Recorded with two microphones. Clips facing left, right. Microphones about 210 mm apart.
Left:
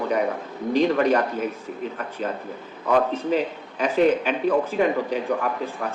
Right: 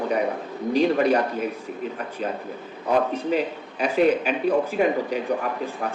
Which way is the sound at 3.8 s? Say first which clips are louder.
Even; 10° right (ahead or behind).